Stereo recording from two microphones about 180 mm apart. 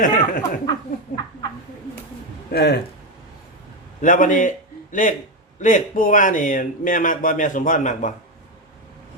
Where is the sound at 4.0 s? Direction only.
45° left (ahead or behind).